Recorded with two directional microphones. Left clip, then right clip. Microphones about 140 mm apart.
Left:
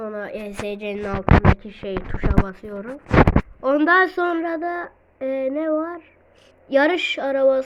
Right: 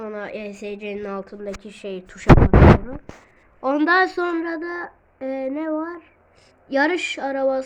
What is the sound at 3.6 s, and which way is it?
A woman's voice, 10° right (ahead or behind).